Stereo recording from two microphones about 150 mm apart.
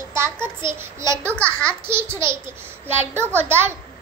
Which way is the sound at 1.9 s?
15° right (ahead or behind).